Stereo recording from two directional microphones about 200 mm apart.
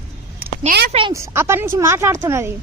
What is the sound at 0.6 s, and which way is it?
Speech, 50° right (ahead or behind).